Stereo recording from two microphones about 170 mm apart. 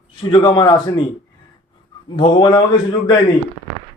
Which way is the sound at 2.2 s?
25° left (ahead or behind).